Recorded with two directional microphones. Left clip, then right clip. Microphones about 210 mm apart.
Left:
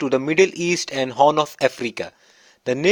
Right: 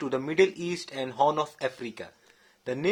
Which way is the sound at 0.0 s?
35° left (ahead or behind).